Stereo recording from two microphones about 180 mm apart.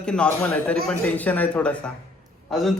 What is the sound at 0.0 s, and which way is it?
A man's voice, 5° left (ahead or behind).